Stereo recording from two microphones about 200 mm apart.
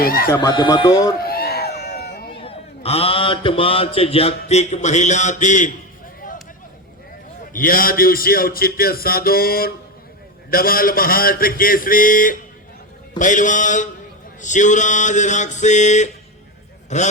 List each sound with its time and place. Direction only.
0.0 s a man's voice: 45° left (ahead or behind)
0.3 s speech: 20° left (ahead or behind)
1.2 s a sound: 50° left (ahead or behind)
2.4 s speech: 30° left (ahead or behind)
7.5 s a man's voice: 45° left (ahead or behind)
13.1 s mantra: 40° left (ahead or behind)